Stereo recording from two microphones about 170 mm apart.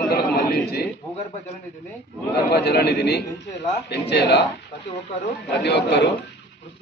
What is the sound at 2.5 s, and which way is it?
A man's voice, 75° left (ahead or behind).